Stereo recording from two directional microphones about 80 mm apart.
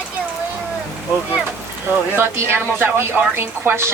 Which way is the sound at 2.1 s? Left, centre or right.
Right.